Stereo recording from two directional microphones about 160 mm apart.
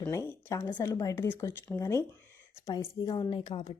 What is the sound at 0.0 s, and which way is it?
A woman's voice, 15° left (ahead or behind).